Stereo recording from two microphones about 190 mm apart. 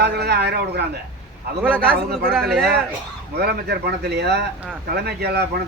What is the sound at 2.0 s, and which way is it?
A man's voice, 50° right (ahead or behind).